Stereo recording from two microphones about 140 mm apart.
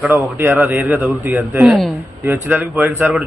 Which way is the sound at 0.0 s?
15° right (ahead or behind).